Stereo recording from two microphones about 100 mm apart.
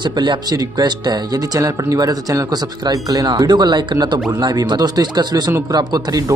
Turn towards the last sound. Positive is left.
turn(degrees=-40)  # may be behind; listen again after turning